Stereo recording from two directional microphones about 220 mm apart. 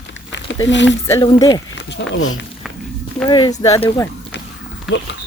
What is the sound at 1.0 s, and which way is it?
Speech, 15° left (ahead or behind).